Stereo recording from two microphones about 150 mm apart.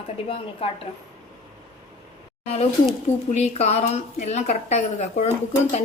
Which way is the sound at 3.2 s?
45° left (ahead or behind).